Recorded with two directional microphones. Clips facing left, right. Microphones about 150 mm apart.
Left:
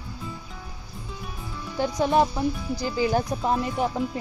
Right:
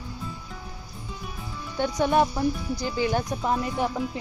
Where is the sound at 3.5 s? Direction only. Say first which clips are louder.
Even; 5° left (ahead or behind).